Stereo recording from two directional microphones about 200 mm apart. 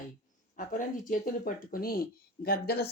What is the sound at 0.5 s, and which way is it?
Speech, 40° left (ahead or behind).